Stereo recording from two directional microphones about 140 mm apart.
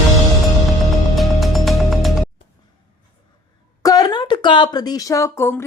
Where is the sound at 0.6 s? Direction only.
Centre (ahead or behind).